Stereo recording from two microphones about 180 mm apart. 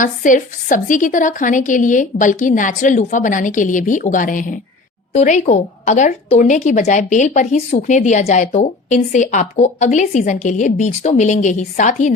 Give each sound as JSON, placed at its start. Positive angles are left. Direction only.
{"t": 0.0, "sound": "a woman's voice", "side_deg": 45}